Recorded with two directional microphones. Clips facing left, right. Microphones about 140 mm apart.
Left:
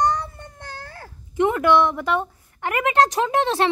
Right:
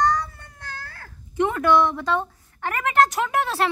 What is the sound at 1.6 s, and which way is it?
A woman's voice, 10° left (ahead or behind).